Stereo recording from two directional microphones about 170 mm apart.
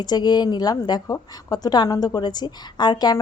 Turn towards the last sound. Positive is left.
turn(degrees=25)  # may be behind; listen again after turning